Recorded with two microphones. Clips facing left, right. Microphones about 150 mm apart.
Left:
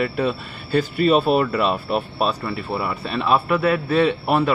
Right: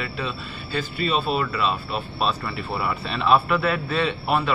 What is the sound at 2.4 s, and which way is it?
A man's voice, 45° left (ahead or behind).